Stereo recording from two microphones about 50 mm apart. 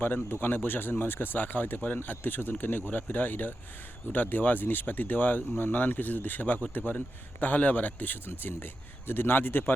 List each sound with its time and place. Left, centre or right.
0.0 s a man's voice: left